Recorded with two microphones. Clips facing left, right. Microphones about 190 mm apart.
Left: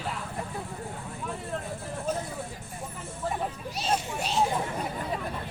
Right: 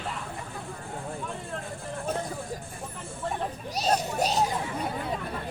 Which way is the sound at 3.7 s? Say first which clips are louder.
Right 5 dB; 40° right (ahead or behind).